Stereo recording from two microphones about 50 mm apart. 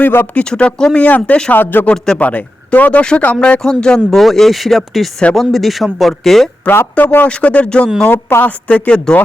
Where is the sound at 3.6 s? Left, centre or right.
Centre.